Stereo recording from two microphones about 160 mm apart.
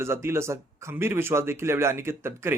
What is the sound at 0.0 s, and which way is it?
Speech, 15° right (ahead or behind).